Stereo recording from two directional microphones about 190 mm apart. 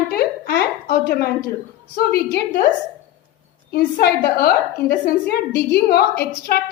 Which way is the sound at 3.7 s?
55° left (ahead or behind).